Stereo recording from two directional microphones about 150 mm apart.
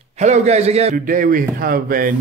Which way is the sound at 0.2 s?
50° right (ahead or behind).